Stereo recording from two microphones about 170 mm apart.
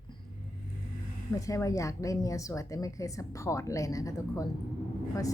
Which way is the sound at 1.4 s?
20° left (ahead or behind).